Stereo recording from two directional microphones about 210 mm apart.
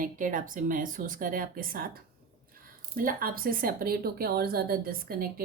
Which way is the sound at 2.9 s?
45° right (ahead or behind).